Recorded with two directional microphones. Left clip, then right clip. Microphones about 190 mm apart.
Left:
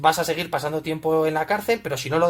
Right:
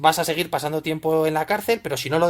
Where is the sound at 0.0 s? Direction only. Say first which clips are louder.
Right 1 dB; 40° right (ahead or behind).